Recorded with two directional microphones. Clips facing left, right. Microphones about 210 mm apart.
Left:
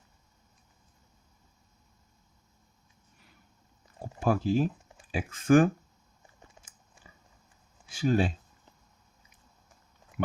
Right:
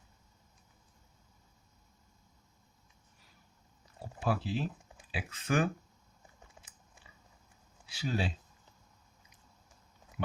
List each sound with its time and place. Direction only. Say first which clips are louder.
4.2 s speech: left 7 dB; 45° left (ahead or behind)
7.9 s speech: left 8 dB; 50° left (ahead or behind)